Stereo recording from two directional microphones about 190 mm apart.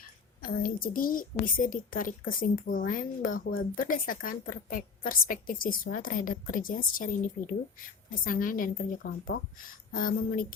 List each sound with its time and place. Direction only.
0.4 s a woman's voice: 50° left (ahead or behind)